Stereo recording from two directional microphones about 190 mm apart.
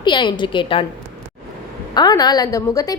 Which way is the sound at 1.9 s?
20° left (ahead or behind).